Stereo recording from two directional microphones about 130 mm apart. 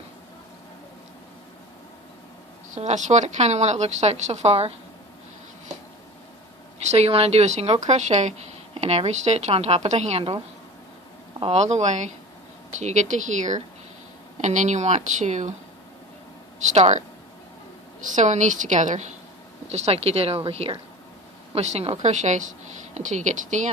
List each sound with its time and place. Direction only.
2.7 s a woman's voice: 65° right (ahead or behind)
6.9 s a woman's voice: 50° right (ahead or behind)
8.7 s a woman's voice: 50° right (ahead or behind)
11.3 s a woman's voice: 50° right (ahead or behind)
16.7 s a woman's voice: 60° right (ahead or behind)
18.1 s a woman's voice: 65° right (ahead or behind)